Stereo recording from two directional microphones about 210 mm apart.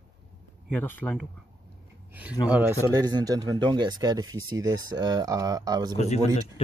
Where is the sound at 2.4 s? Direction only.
5° right (ahead or behind).